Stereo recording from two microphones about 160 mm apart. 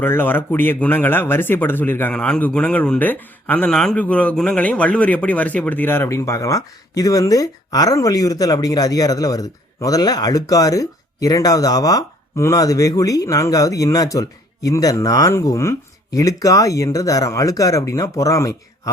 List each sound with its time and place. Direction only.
0.0 s speech: 10° left (ahead or behind)